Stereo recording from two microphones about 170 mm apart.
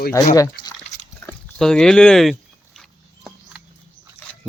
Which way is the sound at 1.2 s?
15° left (ahead or behind).